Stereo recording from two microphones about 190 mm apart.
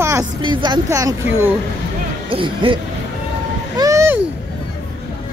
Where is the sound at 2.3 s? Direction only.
25° right (ahead or behind).